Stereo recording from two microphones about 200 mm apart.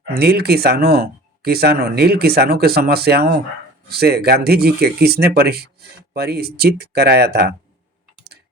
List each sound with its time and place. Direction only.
0.1 s speech: 50° right (ahead or behind)